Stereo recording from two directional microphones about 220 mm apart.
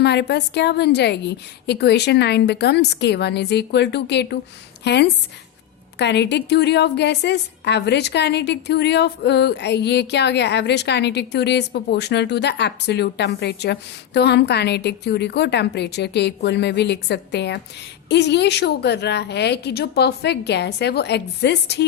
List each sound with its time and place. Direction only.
0.0 s a woman's voice: 50° left (ahead or behind)